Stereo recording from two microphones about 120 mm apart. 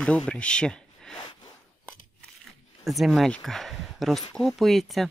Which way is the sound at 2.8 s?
Centre (ahead or behind).